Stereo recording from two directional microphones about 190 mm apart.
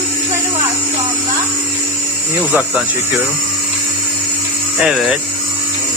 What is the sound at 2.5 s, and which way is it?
Speech, 5° right (ahead or behind).